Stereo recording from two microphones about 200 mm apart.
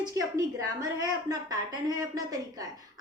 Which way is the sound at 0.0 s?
15° right (ahead or behind).